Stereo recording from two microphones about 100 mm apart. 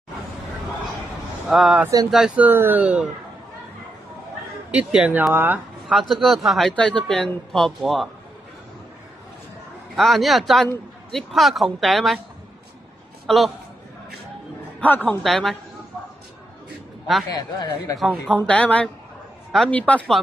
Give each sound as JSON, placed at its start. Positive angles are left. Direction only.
{"t": 1.5, "sound": "speech", "side_deg": -5}
{"t": 2.3, "sound": "speech", "side_deg": -20}
{"t": 4.6, "sound": "speech", "side_deg": -10}
{"t": 5.9, "sound": "speech", "side_deg": 0}
{"t": 9.9, "sound": "speech", "side_deg": 0}
{"t": 13.3, "sound": "speech", "side_deg": 5}
{"t": 14.8, "sound": "a woman's voice", "side_deg": 15}
{"t": 15.2, "sound": "speech", "side_deg": 5}
{"t": 17.3, "sound": "speech", "side_deg": 40}
{"t": 17.9, "sound": "a woman's voice", "side_deg": 5}